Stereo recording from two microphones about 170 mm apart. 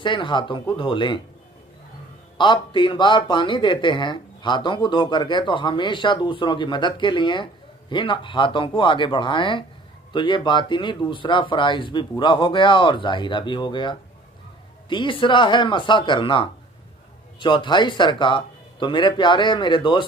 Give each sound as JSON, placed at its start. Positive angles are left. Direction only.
{"t": 0.0, "sound": "speech", "side_deg": 30}
{"t": 2.3, "sound": "speech", "side_deg": 25}